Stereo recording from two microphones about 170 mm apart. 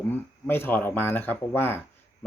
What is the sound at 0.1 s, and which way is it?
Speech, 15° left (ahead or behind).